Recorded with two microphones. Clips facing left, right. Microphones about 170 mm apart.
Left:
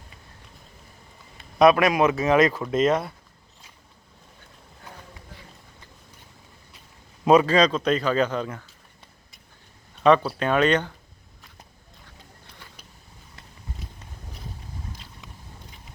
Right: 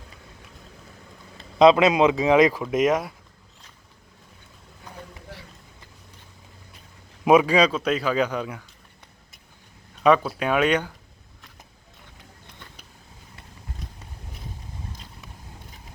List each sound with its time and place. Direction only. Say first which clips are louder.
1.4 s speech: right 2 dB; 20° right (ahead or behind)
5.3 s run: right 6 dB; 75° right (ahead or behind)
7.3 s speech: even; 10° right (ahead or behind)
10.3 s speech: left 1 dB; 10° right (ahead or behind)